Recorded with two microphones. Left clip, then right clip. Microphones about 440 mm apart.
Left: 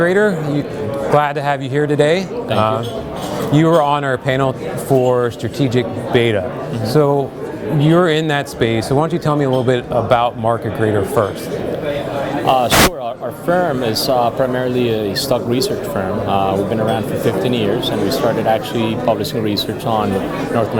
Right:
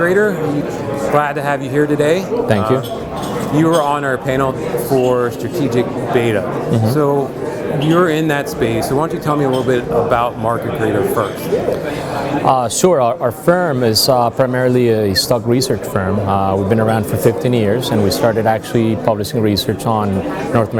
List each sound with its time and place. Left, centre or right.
0.0 s speech: left
3.5 s speech: left
12.5 s a man's voice: right